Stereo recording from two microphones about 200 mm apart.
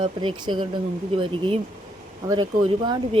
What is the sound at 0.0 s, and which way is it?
Speech, 25° right (ahead or behind).